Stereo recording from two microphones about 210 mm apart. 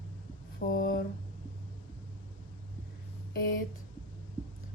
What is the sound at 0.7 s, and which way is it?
Speech, 40° left (ahead or behind).